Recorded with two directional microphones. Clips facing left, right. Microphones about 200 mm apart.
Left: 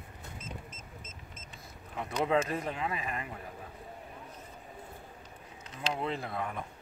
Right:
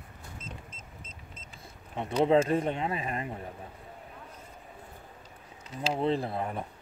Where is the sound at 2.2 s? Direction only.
30° right (ahead or behind).